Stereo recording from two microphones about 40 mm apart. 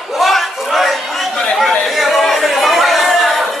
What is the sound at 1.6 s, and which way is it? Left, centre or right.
Chatter, centre.